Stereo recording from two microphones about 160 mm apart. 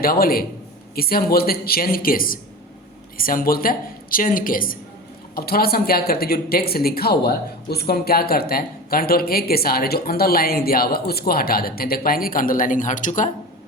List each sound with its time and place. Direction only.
0.0 s a woman's voice: 65° left (ahead or behind); by 13.3 s 50° left (ahead or behind)